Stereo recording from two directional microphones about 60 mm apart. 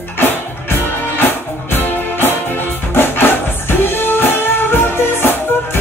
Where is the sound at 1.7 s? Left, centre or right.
Left.